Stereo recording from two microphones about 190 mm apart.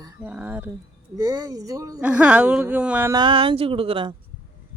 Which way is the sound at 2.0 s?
5° right (ahead or behind).